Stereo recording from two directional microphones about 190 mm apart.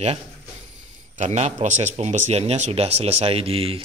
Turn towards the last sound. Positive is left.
turn(degrees=-30)  # may be behind; listen again after turning